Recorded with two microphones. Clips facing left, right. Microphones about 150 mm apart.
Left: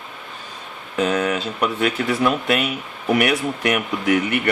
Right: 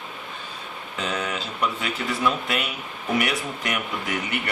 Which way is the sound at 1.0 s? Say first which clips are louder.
Left 9 dB; 55° left (ahead or behind).